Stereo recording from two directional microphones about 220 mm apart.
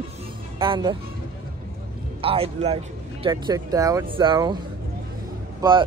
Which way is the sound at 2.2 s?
25° right (ahead or behind).